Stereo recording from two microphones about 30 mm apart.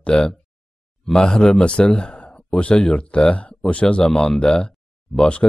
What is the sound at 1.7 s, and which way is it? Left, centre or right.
Speech, left.